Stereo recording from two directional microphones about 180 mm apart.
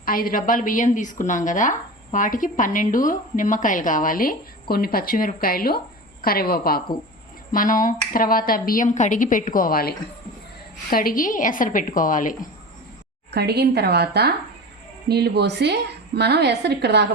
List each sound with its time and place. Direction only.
0.0 s a woman's voice: 50° left (ahead or behind)
13.3 s a woman's voice: 65° right (ahead or behind)